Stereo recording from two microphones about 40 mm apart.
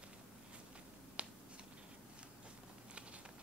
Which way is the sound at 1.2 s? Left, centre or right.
Right.